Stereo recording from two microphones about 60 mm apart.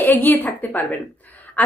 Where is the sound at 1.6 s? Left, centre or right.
Left.